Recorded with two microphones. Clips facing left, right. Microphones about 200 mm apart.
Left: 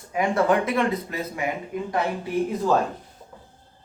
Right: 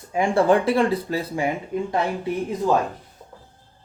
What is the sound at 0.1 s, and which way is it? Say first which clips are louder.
Speech: right 3 dB; 30° right (ahead or behind).